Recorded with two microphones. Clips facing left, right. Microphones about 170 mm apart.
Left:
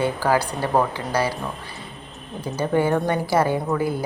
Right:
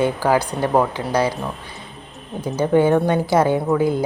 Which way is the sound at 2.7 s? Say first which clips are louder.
Right 5 dB; 20° right (ahead or behind).